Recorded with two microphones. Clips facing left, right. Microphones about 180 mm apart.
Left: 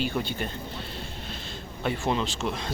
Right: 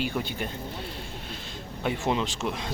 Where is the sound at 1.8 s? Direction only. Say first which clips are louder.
Even; 15° right (ahead or behind).